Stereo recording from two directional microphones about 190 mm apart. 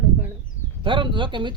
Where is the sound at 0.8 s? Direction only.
25° right (ahead or behind).